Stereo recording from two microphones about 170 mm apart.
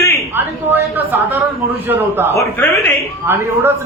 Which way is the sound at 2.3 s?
15° left (ahead or behind).